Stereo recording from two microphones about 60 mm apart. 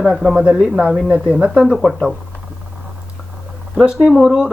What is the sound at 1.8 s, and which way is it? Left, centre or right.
Speech, centre.